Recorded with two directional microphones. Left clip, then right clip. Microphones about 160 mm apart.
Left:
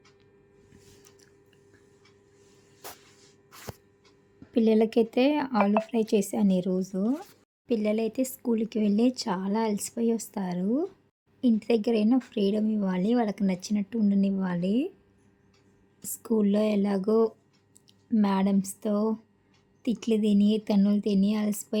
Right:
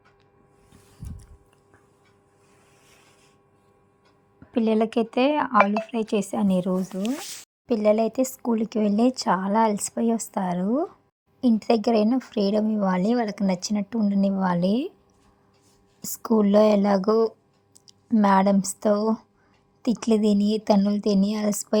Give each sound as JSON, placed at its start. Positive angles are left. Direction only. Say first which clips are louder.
{"t": 4.5, "sound": "speech", "louder": "even", "side_deg": -5}
{"t": 16.0, "sound": "speech", "louder": "right 5 dB", "side_deg": -30}